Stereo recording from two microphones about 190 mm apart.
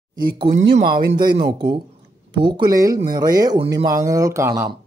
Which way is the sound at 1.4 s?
25° right (ahead or behind).